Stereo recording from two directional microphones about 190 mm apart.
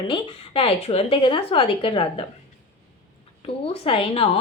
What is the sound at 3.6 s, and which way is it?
Speech, 30° left (ahead or behind).